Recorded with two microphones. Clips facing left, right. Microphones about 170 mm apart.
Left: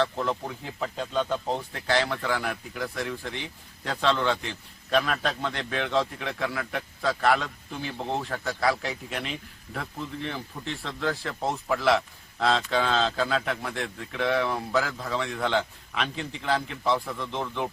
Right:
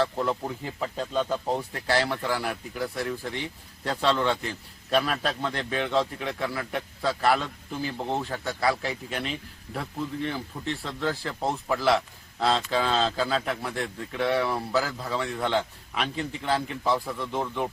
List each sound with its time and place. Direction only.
0.0 s a man's voice: 5° right (ahead or behind)